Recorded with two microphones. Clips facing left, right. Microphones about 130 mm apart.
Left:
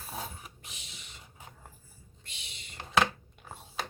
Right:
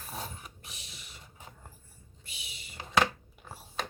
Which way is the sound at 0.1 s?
Centre (ahead or behind).